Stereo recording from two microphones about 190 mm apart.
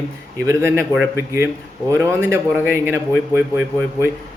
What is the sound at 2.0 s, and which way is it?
Speech, 15° right (ahead or behind).